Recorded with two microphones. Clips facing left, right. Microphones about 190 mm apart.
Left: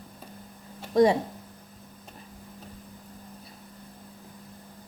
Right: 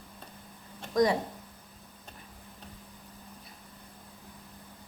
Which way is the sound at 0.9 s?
30° left (ahead or behind).